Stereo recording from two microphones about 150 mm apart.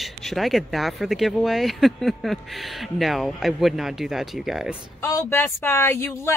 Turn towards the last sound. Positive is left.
turn(degrees=15)  # may be behind; listen again after turning